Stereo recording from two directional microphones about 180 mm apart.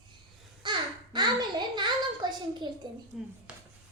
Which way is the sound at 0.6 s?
25° right (ahead or behind).